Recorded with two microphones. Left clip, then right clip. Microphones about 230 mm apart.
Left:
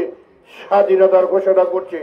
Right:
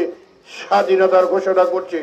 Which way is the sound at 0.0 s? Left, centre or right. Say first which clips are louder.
Right 1 dB; right.